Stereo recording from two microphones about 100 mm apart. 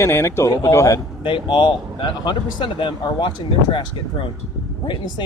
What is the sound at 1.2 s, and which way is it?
Speech, 55° left (ahead or behind).